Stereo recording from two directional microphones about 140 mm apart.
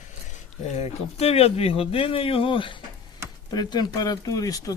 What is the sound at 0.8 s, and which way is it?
Speech, 45° left (ahead or behind).